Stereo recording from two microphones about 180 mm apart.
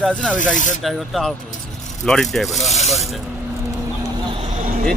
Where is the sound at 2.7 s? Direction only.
35° left (ahead or behind).